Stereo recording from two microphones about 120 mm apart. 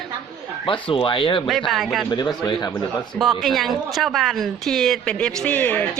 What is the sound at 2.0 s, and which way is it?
Speech, 35° left (ahead or behind).